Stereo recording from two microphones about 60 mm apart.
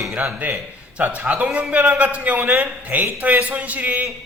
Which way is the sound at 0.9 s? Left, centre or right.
Right.